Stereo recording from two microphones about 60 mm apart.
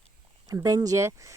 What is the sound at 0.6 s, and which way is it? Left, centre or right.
Speech, right.